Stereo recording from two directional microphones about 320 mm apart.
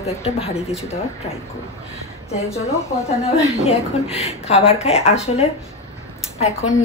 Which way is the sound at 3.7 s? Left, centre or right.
Centre.